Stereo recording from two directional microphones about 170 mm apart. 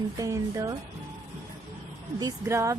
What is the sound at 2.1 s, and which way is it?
Speech, 20° right (ahead or behind).